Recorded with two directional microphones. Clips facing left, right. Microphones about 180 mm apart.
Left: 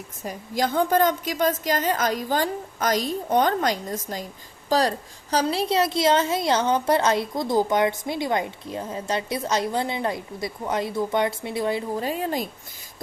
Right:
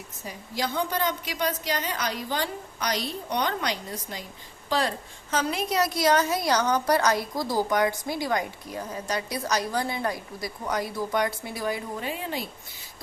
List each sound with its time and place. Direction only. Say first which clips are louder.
0.2 s a woman's voice: left 6 dB; 45° left (ahead or behind); by 12.0 s 25° left (ahead or behind)
12.0 s a woman's voice: left 6 dB; 40° left (ahead or behind)